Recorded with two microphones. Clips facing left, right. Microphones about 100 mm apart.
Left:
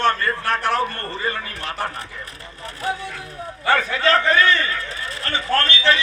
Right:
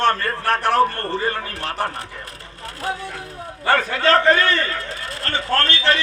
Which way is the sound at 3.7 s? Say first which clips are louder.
Right 1 dB; 45° right (ahead or behind).